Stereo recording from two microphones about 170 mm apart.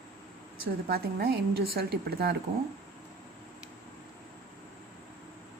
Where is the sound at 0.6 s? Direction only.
65° right (ahead or behind).